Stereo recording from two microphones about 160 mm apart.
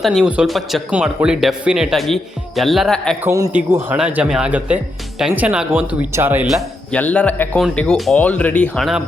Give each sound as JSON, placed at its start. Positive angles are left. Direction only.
{"t": 0.0, "sound": "speech", "side_deg": 0}
{"t": 3.2, "sound": "speech", "side_deg": -20}
{"t": 6.5, "sound": "speech", "side_deg": 0}